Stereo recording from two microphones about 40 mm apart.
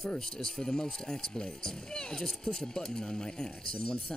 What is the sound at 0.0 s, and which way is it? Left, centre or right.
Speech, centre.